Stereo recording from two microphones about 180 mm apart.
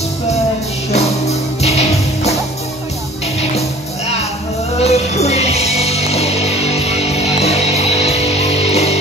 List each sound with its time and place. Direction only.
0.9 s music: 35° left (ahead or behind)
4.7 s music: 35° left (ahead or behind)